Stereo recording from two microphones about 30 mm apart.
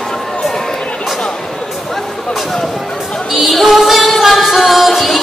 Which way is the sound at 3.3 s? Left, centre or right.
Centre.